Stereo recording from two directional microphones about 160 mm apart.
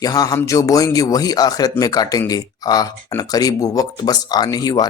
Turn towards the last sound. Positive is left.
turn(degrees=25)  # may be behind; listen again after turning